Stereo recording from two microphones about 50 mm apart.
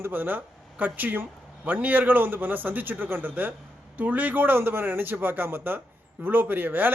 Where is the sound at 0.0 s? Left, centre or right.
Right.